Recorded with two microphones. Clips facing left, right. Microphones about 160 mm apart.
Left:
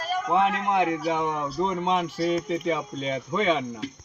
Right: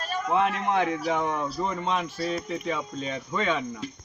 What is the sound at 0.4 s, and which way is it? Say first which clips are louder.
A man's voice: left 2 dB; 15° left (ahead or behind).